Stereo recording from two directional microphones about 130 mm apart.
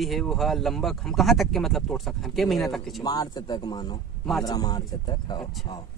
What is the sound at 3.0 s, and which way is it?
A man's voice, 30° left (ahead or behind).